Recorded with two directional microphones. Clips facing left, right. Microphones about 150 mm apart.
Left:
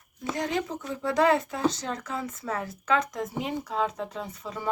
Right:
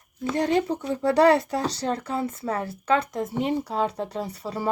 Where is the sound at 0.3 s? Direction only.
35° right (ahead or behind).